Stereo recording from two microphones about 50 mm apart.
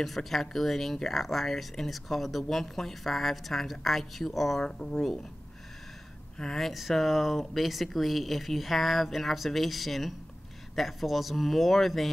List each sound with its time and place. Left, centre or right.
0.0 s speech: centre
4.6 s speech: centre
6.3 s speech: centre
6.6 s speech: centre